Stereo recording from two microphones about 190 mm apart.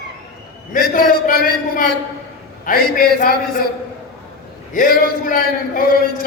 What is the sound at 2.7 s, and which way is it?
Speech, 50° left (ahead or behind).